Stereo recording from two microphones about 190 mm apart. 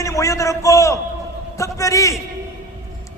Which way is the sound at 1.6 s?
15° left (ahead or behind).